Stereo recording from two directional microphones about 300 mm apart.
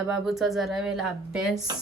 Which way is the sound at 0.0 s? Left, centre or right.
Centre.